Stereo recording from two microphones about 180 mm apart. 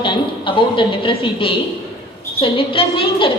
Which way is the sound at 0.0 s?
30° left (ahead or behind).